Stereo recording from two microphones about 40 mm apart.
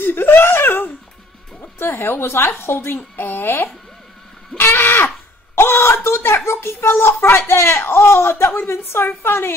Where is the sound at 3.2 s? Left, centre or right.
Left.